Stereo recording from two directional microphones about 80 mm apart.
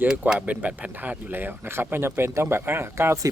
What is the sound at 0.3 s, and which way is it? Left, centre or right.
Speech, centre.